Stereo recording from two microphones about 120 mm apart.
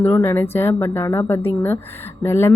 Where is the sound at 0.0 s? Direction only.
20° left (ahead or behind).